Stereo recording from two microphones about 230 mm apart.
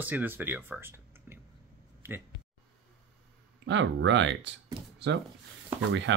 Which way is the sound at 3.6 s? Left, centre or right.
Right.